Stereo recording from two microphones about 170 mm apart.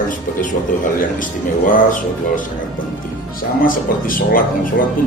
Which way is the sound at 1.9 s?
50° left (ahead or behind).